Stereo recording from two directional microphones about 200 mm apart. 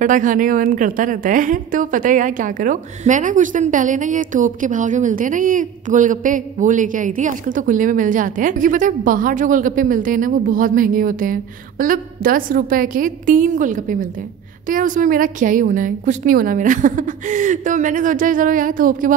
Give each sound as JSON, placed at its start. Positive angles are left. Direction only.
{"t": 0.0, "sound": "a woman's voice", "side_deg": -40}